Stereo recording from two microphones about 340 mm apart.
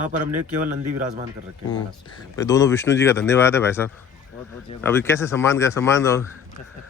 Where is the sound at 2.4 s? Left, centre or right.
Centre.